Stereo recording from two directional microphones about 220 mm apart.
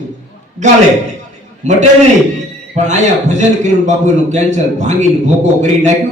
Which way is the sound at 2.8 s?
35° right (ahead or behind).